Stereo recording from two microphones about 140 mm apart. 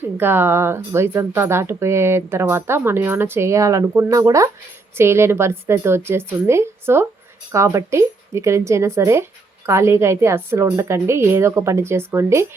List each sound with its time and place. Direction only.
0.2 s a woman's voice: 15° right (ahead or behind)